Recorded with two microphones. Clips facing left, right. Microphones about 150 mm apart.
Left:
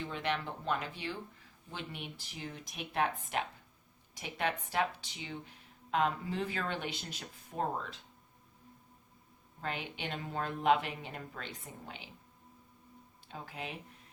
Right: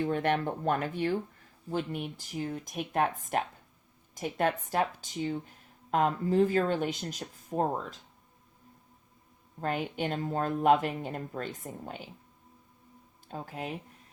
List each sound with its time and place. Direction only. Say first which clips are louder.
0.0 s a woman's voice: right 8 dB; 50° right (ahead or behind)
9.6 s a woman's voice: right 8 dB; 45° right (ahead or behind)
13.2 s a woman's voice: right 6 dB; 45° right (ahead or behind)